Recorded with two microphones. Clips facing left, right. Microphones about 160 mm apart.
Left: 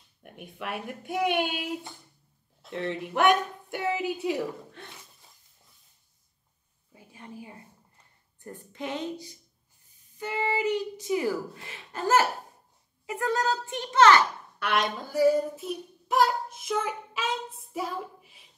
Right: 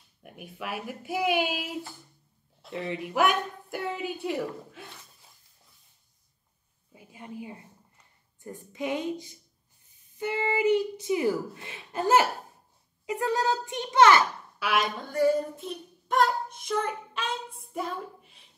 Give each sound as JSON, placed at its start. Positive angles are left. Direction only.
{"t": 0.2, "sound": "speech", "side_deg": 0}
{"t": 6.9, "sound": "a sound", "side_deg": -20}
{"t": 8.5, "sound": "a woman's voice", "side_deg": -10}
{"t": 10.1, "sound": "music", "side_deg": -25}
{"t": 10.5, "sound": "a child's voice", "side_deg": -25}